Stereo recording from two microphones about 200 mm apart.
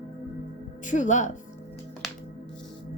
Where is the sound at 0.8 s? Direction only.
40° left (ahead or behind).